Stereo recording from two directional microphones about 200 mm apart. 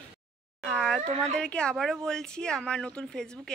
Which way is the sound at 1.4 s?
5° left (ahead or behind).